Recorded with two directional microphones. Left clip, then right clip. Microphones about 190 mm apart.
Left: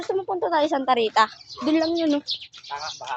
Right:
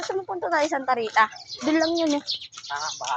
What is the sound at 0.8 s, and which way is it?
Speech, 45° left (ahead or behind).